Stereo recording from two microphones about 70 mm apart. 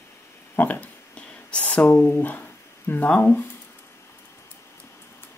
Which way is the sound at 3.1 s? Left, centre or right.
Left.